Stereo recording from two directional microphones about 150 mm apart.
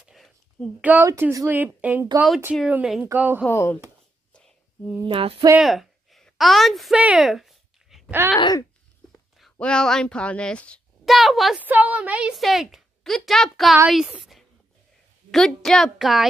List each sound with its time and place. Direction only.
0.0 s a sound: centre (ahead or behind)
0.8 s a woman's voice: 15° right (ahead or behind)
3.4 s speech: 15° left (ahead or behind)
4.3 s whispering: 5° left (ahead or behind)
5.0 s a sound: 40° right (ahead or behind)
5.6 s a sound: centre (ahead or behind)
8.4 s speech: 30° left (ahead or behind)
9.4 s a child's voice: 5° left (ahead or behind)
11.6 s a woman's voice: 10° right (ahead or behind)